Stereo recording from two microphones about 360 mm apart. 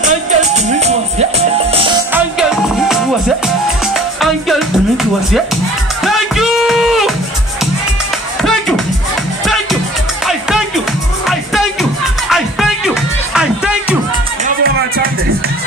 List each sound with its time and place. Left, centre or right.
0.0 s music: centre
3.4 s music: centre
8.4 s music: centre
11.2 s music: centre
14.6 s music: right